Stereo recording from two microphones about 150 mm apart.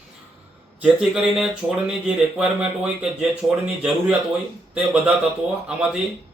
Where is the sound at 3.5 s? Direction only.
5° right (ahead or behind).